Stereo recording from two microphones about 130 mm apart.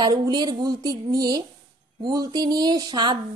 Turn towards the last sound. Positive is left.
turn(degrees=-35)  # may be behind; listen again after turning